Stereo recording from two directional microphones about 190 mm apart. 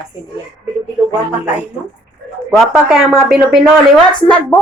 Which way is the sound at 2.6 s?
5° right (ahead or behind).